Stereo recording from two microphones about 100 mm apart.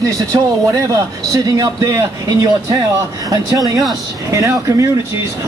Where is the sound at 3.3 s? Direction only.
35° right (ahead or behind).